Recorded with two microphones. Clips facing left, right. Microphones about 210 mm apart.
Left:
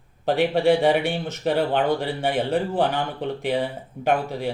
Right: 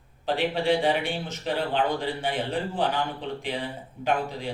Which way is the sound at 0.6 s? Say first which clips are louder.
Left 5 dB; 65° left (ahead or behind).